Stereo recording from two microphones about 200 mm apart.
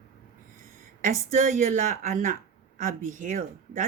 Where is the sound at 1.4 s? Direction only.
40° right (ahead or behind).